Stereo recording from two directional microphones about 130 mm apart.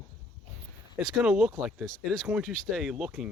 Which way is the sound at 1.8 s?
5° left (ahead or behind).